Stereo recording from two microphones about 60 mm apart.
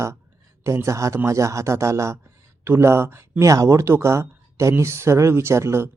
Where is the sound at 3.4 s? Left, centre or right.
Right.